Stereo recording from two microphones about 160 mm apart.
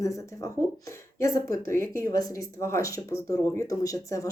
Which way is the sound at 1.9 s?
25° left (ahead or behind).